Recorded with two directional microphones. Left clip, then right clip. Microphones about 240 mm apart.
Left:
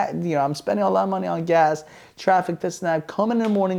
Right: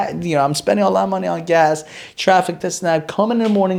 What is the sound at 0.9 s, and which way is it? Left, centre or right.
Speech, left.